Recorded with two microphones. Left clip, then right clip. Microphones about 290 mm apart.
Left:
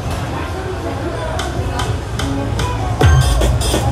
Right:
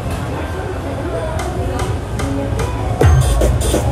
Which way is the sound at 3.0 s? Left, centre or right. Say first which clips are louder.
Right 1 dB; centre.